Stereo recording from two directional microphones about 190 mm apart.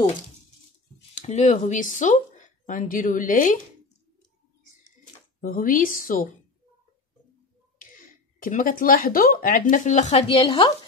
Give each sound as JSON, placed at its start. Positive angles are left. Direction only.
{"t": 1.1, "sound": "speech", "side_deg": 40}
{"t": 5.4, "sound": "speech", "side_deg": 45}
{"t": 8.4, "sound": "speech", "side_deg": 45}